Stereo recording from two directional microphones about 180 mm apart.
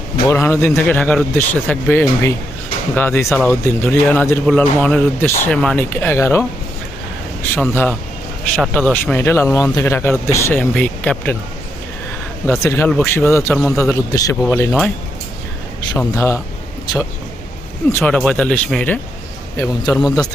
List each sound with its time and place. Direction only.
0.3 s a man's voice: 15° left (ahead or behind)
7.5 s a man's voice: 10° left (ahead or behind)
12.5 s a man's voice: 15° left (ahead or behind)
15.9 s a man's voice: 15° left (ahead or behind)
17.8 s a man's voice: 10° left (ahead or behind)
19.5 s a man's voice: 20° left (ahead or behind)